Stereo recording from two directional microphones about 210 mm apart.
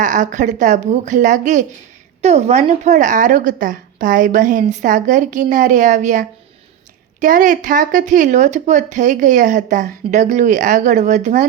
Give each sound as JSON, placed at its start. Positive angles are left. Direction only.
{"t": 0.0, "sound": "speech", "side_deg": -35}